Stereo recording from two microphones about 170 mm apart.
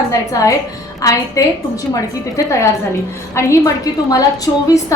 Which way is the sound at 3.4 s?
15° left (ahead or behind).